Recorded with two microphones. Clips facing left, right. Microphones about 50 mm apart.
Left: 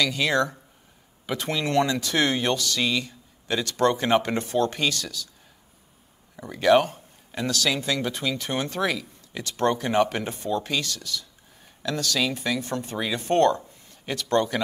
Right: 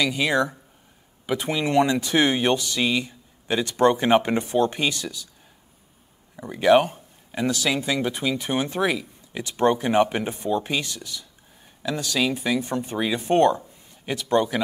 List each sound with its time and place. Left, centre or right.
0.0 s a man's voice: centre
6.3 s a man's voice: centre